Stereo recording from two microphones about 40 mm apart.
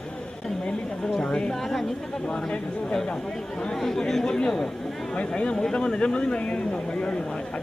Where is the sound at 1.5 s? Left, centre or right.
Centre.